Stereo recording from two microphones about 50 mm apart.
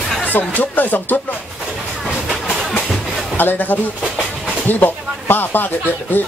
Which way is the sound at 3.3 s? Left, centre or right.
Left.